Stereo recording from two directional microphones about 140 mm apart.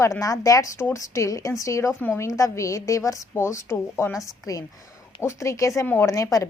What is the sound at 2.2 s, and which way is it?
Speech, 25° left (ahead or behind).